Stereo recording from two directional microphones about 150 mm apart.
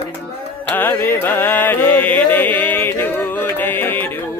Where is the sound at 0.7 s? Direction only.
15° left (ahead or behind).